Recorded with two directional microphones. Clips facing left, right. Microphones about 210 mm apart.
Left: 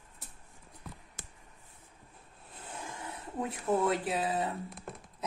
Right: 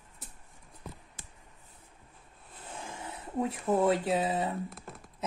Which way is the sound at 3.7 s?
25° right (ahead or behind).